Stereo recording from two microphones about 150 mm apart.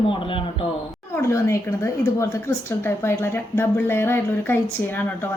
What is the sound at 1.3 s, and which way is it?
A woman's voice, 20° left (ahead or behind).